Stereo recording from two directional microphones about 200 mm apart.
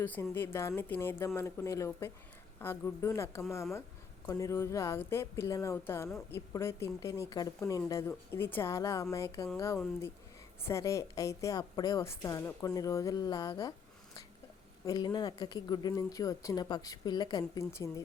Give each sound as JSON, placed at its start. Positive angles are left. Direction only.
{"t": 0.0, "sound": "a woman's voice", "side_deg": 10}
{"t": 10.6, "sound": "a woman's voice", "side_deg": 15}
{"t": 14.8, "sound": "speech", "side_deg": 20}